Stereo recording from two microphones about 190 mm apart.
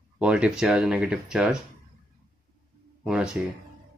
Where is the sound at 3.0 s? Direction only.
5° right (ahead or behind).